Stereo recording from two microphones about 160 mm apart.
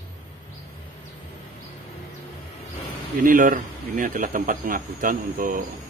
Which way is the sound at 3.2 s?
55° right (ahead or behind).